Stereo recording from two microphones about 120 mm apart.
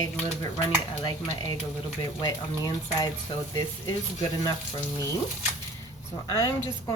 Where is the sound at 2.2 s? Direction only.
30° left (ahead or behind).